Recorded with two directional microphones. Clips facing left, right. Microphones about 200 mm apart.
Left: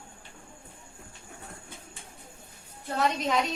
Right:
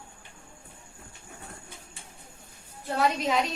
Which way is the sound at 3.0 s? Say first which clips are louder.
Right 1 dB; centre (ahead or behind).